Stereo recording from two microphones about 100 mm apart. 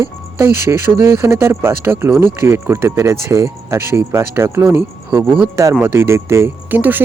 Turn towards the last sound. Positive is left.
turn(degrees=-20)  # may be behind; listen again after turning